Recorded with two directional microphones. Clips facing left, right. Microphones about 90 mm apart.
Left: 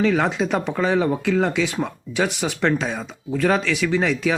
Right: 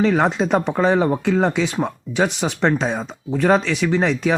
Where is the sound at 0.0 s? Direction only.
20° right (ahead or behind).